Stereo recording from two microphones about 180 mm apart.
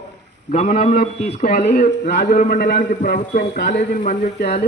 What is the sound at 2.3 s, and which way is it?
A man's voice, 55° left (ahead or behind).